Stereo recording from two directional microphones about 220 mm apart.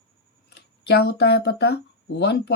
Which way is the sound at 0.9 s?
50° left (ahead or behind).